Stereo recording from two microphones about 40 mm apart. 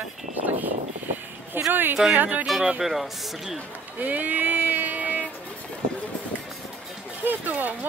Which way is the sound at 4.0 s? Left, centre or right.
Right.